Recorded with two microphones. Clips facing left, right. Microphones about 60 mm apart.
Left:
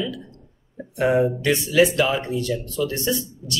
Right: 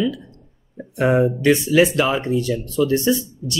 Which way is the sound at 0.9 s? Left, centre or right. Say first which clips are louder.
Right 2 dB; right.